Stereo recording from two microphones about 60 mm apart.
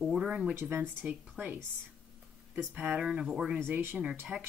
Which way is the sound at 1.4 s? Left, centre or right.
Right.